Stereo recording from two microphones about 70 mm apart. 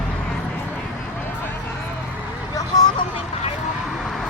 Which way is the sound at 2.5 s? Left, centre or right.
Left.